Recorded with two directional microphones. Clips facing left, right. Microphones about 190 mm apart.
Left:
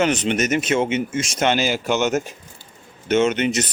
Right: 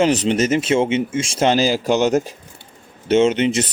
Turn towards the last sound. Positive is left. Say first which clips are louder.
# right 3 dB
turn(degrees=-25)  # may be behind; listen again after turning